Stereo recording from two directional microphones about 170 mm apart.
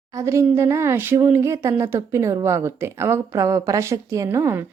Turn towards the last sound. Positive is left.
turn(degrees=-15)  # may be behind; listen again after turning